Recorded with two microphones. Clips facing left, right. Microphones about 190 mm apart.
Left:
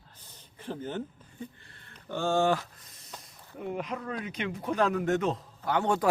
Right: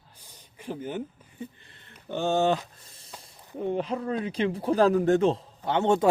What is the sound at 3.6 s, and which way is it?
A man's voice, 30° right (ahead or behind).